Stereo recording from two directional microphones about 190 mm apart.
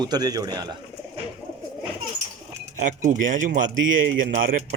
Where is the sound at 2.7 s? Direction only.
40° right (ahead or behind).